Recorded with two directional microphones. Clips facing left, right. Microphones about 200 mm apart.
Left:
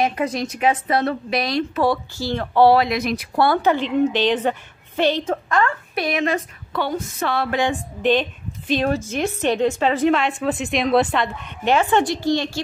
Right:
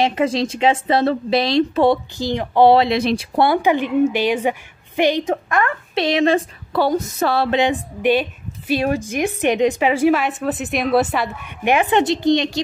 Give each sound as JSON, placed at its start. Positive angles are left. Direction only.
{"t": 0.0, "sound": "a woman's voice", "side_deg": -25}
{"t": 7.5, "sound": "a woman's voice", "side_deg": -20}